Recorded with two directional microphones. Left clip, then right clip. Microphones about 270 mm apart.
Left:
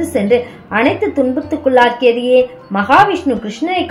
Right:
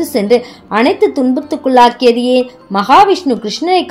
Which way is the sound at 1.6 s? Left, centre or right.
Right.